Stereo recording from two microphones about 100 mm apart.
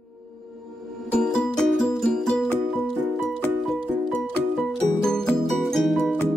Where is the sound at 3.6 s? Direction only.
Centre (ahead or behind).